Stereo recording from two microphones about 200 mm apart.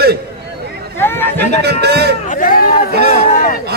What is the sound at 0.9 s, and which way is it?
Chatter, 10° left (ahead or behind).